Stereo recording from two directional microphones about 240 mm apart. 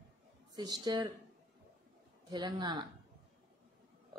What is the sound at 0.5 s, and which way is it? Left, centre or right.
Speech, centre.